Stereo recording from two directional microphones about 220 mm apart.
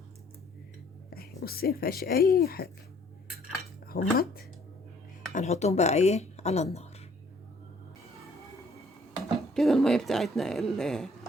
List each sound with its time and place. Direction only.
1.1 s a woman's voice: 45° left (ahead or behind)
3.8 s speech: 45° left (ahead or behind)
5.3 s speech: 30° left (ahead or behind)
9.6 s speech: centre (ahead or behind)